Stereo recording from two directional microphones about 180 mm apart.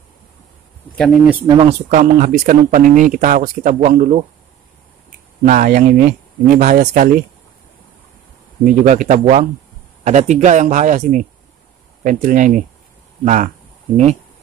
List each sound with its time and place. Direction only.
0.9 s speech: centre (ahead or behind)
1.5 s speech: 30° right (ahead or behind)
1.9 s speech: 45° right (ahead or behind)
5.4 s speech: 45° right (ahead or behind)
8.6 s speech: 45° right (ahead or behind)